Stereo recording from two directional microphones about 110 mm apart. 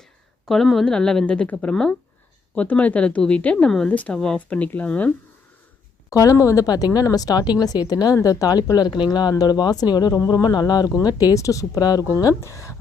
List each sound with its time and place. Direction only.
0.4 s a woman's voice: centre (ahead or behind)
6.1 s speech: 30° left (ahead or behind)